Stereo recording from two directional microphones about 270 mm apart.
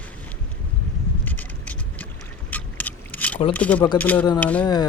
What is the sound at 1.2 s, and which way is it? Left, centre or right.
Vehicle, centre.